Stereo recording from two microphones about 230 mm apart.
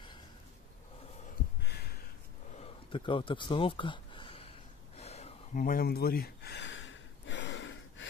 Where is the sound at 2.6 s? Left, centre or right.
Left.